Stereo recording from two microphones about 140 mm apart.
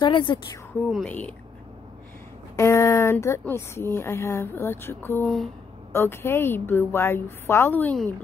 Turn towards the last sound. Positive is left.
turn(degrees=15)  # may be behind; listen again after turning